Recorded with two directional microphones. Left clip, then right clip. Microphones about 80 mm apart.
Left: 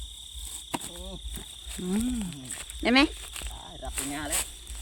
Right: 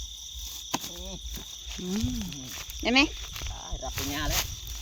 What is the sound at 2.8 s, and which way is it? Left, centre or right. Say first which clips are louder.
Speech: left 1 dB; left.